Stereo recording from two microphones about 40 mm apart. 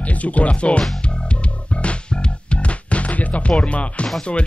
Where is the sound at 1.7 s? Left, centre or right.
Left.